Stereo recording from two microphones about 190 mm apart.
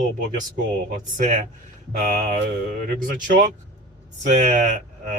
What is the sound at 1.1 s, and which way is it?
A man's voice, 40° right (ahead or behind).